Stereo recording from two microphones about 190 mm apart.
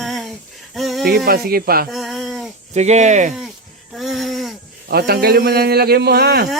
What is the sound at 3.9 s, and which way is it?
Speech, centre (ahead or behind).